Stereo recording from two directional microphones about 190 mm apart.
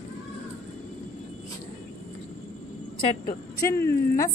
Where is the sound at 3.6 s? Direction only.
15° left (ahead or behind).